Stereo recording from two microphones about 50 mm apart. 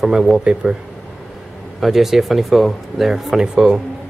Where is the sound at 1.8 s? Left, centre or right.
Centre.